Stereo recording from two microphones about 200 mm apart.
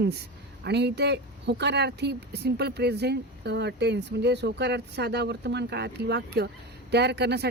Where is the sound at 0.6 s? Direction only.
55° right (ahead or behind).